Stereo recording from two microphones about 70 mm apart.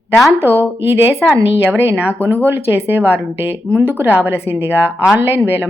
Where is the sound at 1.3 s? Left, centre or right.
Right.